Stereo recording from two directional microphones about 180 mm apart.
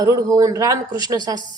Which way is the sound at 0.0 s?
20° right (ahead or behind).